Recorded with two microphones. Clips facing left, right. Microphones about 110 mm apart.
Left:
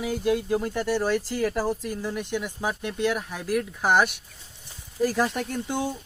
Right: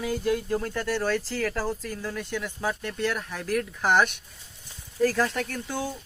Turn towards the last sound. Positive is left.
turn(degrees=20)  # may be behind; listen again after turning